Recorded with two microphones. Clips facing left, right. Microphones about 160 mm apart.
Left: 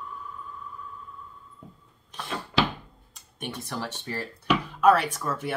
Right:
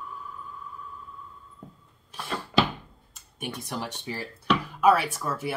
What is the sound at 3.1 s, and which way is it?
Speech, 10° right (ahead or behind).